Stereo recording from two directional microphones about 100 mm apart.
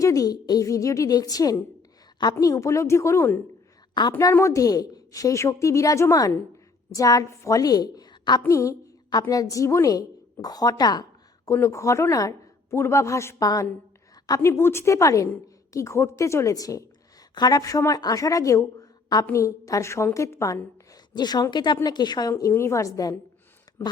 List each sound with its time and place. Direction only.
0.0 s a woman's voice: 35° left (ahead or behind)
8.4 s a woman's voice: 30° left (ahead or behind)
11.4 s a woman's voice: 30° left (ahead or behind)
21.2 s a woman's voice: 45° left (ahead or behind)